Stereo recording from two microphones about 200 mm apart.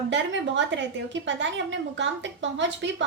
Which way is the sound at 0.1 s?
65° right (ahead or behind).